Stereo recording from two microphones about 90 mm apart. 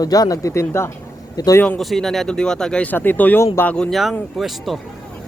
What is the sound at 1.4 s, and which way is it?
Speech, 45° left (ahead or behind).